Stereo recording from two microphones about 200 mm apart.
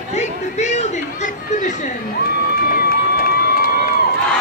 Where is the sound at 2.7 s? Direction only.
50° left (ahead or behind).